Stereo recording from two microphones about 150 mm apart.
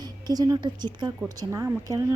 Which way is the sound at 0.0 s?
25° right (ahead or behind).